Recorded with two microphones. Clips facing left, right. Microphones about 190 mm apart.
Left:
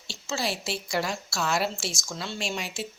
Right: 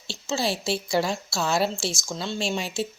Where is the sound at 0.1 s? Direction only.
25° right (ahead or behind).